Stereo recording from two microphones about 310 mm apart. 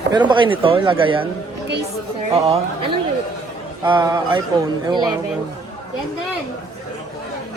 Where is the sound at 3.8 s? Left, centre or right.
Centre.